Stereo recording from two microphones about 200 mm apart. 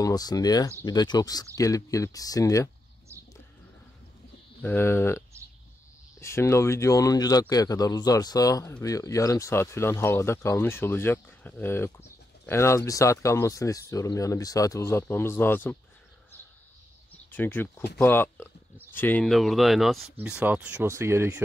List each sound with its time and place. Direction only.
0.0 s speech: 20° left (ahead or behind)
4.6 s speech: 10° left (ahead or behind)
17.3 s speech: 10° left (ahead or behind); by 21.4 s 15° right (ahead or behind)